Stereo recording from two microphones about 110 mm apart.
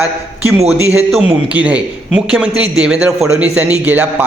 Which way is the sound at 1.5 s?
10° right (ahead or behind).